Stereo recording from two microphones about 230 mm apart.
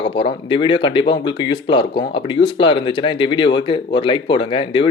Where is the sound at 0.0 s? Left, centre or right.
Left.